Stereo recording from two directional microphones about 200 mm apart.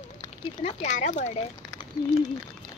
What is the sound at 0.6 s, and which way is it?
Speech, 35° left (ahead or behind).